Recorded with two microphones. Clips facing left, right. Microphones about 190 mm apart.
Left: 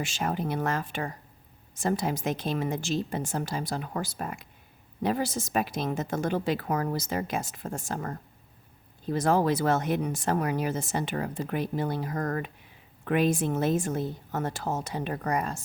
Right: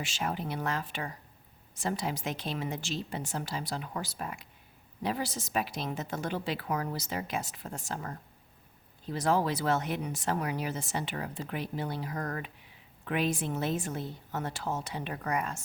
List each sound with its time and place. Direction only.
0.0 s speech: 45° left (ahead or behind)